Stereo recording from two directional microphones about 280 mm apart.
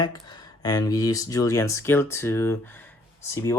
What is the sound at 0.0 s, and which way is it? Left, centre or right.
Speech, centre.